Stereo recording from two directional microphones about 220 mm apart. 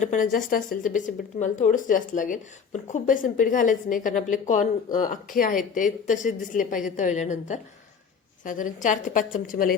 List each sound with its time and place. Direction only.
0.0 s a woman's voice: 35° left (ahead or behind)